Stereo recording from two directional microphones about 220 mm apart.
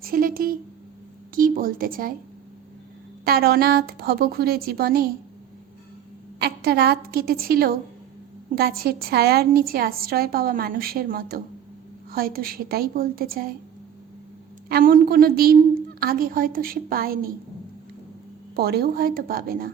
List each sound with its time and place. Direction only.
0.0 s a woman's voice: 40° right (ahead or behind)
3.2 s a woman's voice: 45° right (ahead or behind)
6.4 s a woman's voice: 45° right (ahead or behind)
14.7 s a woman's voice: 40° right (ahead or behind)
18.5 s a woman's voice: 45° right (ahead or behind)